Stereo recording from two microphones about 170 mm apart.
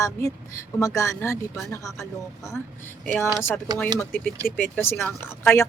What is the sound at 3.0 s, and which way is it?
Speech, 10° left (ahead or behind).